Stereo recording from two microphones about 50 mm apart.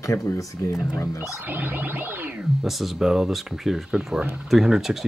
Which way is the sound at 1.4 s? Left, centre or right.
Right.